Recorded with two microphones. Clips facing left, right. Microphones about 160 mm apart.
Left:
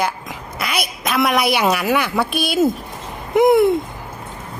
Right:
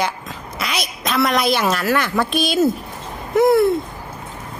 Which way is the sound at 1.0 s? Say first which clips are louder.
Even; 10° left (ahead or behind).